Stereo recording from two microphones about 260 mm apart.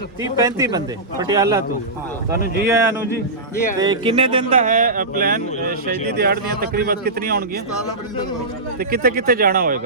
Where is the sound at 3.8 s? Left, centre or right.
Centre; by 7.6 s right.